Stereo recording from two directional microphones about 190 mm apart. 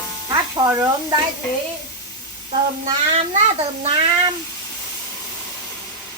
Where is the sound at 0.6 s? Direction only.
20° right (ahead or behind).